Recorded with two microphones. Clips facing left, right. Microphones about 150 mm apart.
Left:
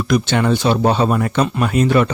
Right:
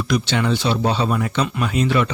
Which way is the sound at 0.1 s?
50° left (ahead or behind).